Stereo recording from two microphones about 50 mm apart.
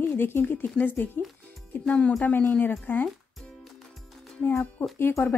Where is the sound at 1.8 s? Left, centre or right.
Left.